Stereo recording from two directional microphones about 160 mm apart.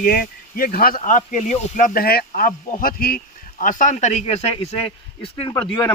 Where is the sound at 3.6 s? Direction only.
55° left (ahead or behind); by 5.3 s 40° left (ahead or behind).